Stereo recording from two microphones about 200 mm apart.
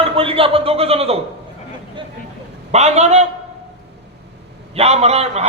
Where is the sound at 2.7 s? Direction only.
35° right (ahead or behind).